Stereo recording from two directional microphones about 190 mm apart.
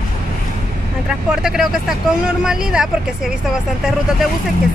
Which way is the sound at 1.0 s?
5° right (ahead or behind).